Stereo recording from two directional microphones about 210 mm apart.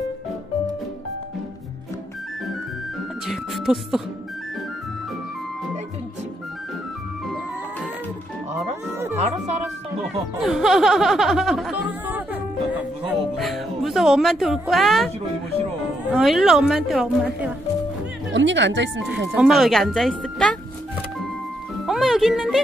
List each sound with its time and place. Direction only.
3.3 s speech: centre (ahead or behind)
10.4 s speech: centre (ahead or behind)
12.7 s music: 5° right (ahead or behind)
16.1 s speech: centre (ahead or behind)
18.3 s speech: 60° right (ahead or behind)
19.1 s speech: 5° right (ahead or behind)
21.8 s music: centre (ahead or behind)